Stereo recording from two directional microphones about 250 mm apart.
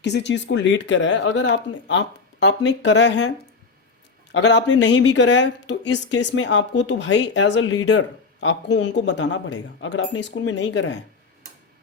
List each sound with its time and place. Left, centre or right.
0.0 s a woman's voice: left